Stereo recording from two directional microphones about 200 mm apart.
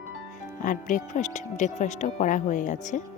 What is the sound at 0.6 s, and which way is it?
Speech, 40° left (ahead or behind).